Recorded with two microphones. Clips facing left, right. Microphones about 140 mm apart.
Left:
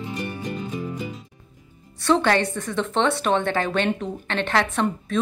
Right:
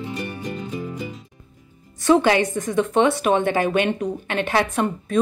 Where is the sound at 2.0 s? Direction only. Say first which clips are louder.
Right 3 dB; 15° right (ahead or behind).